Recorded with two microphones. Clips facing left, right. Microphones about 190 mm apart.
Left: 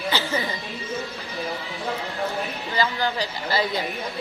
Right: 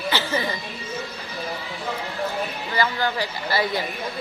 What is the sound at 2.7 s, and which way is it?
A woman's voice, 15° left (ahead or behind).